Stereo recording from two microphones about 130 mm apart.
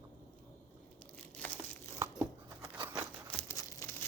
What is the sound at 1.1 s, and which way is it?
Crumpling, 10° left (ahead or behind).